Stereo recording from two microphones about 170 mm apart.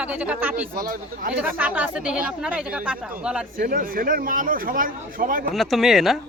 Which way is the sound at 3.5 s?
55° right (ahead or behind).